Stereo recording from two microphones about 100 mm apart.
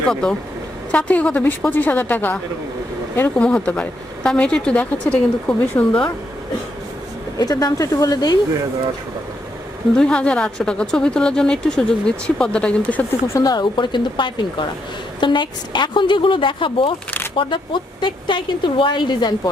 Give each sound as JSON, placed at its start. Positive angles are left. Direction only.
{"t": 0.1, "sound": "speech", "side_deg": 5}
{"t": 7.3, "sound": "speech", "side_deg": 40}
{"t": 10.0, "sound": "speech", "side_deg": 10}
{"t": 13.2, "sound": "speech", "side_deg": 25}
{"t": 13.5, "sound": "a woman's voice", "side_deg": 50}